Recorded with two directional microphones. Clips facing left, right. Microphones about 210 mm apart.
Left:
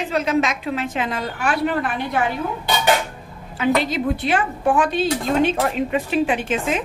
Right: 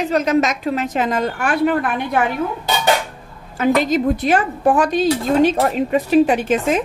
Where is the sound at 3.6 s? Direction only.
45° right (ahead or behind).